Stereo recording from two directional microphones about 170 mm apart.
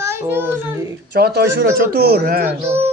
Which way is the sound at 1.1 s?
75° right (ahead or behind).